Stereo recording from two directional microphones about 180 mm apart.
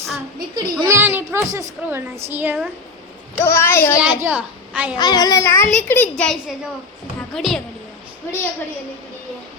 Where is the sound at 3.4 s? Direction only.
15° left (ahead or behind).